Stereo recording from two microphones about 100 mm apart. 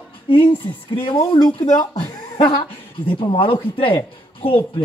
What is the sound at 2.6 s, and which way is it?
Speech, 60° left (ahead or behind).